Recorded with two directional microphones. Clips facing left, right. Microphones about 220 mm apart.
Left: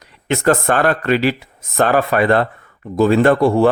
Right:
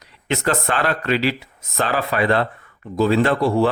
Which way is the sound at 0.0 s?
50° left (ahead or behind).